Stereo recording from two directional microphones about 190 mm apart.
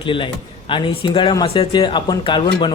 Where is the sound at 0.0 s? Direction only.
25° left (ahead or behind).